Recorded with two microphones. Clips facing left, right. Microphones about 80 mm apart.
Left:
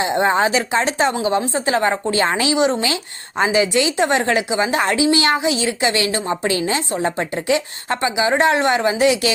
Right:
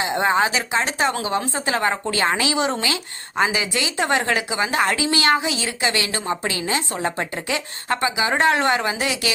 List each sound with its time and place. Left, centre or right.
0.0 s a woman's voice: left